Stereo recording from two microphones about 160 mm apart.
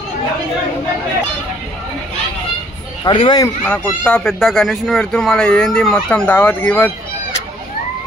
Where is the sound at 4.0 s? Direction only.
5° left (ahead or behind).